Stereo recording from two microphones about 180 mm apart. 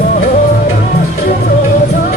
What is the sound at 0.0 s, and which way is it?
Music, 45° left (ahead or behind).